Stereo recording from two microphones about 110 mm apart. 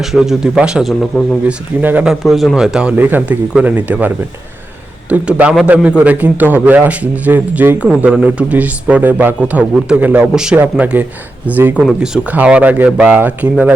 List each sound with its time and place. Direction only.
0.0 s a man's voice: 5° right (ahead or behind)
1.5 s a man's voice: 15° right (ahead or behind)
2.0 s a man's voice: centre (ahead or behind)
2.9 s a man's voice: 15° right (ahead or behind)